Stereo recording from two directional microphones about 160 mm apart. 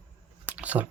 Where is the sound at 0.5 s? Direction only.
10° right (ahead or behind).